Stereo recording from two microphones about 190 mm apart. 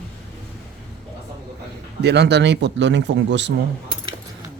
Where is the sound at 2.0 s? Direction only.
60° right (ahead or behind).